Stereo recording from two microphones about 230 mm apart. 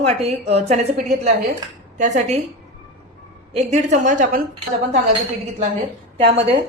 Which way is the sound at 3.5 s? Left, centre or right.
Right.